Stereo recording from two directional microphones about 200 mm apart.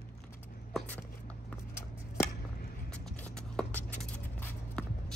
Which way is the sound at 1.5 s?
15° left (ahead or behind).